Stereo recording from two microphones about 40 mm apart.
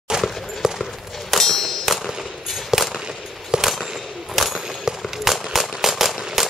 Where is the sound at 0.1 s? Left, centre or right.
Centre.